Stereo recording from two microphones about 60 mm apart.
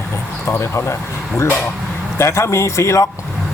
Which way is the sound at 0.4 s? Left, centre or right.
Left.